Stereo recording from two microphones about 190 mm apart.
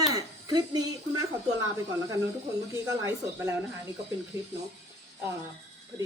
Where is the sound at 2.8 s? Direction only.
15° right (ahead or behind).